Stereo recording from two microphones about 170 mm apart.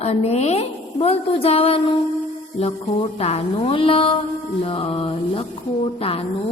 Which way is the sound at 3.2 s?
35° left (ahead or behind).